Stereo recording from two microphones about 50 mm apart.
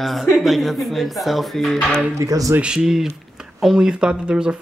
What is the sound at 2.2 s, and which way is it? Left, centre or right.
Speech, right.